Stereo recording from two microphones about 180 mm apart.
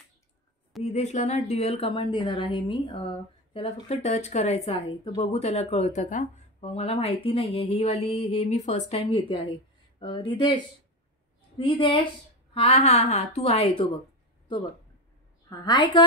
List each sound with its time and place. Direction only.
0.8 s speech: 40° left (ahead or behind)
3.5 s speech: 35° left (ahead or behind)
9.9 s speech: 30° left (ahead or behind)
15.6 s speech: 25° left (ahead or behind)